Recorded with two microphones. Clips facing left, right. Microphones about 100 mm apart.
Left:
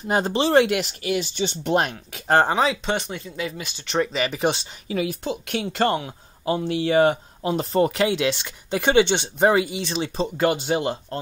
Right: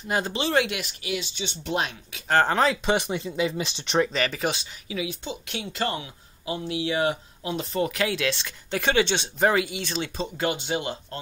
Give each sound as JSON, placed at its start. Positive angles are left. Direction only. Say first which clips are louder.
{"t": 0.1, "sound": "speech", "louder": "left 6 dB", "side_deg": 30}
{"t": 0.8, "sound": "speech", "louder": "left 6 dB", "side_deg": 45}
{"t": 2.4, "sound": "speech", "louder": "left 1 dB", "side_deg": 5}
{"t": 3.2, "sound": "speech", "louder": "right 4 dB", "side_deg": -20}
{"t": 4.0, "sound": "speech", "louder": "left 2 dB", "side_deg": 10}
{"t": 4.4, "sound": "speech", "louder": "left 5 dB", "side_deg": 30}
{"t": 4.8, "sound": "speech", "louder": "left 6 dB", "side_deg": 50}
{"t": 9.6, "sound": "speech", "louder": "left 4 dB", "side_deg": 35}